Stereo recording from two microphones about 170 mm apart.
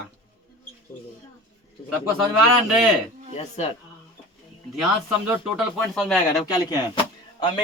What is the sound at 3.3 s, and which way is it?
Speech, 40° left (ahead or behind).